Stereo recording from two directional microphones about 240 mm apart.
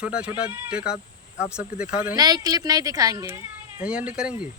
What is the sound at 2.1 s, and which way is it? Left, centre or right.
Speech, centre.